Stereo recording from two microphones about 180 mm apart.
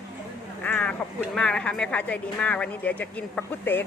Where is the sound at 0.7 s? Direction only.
5° left (ahead or behind).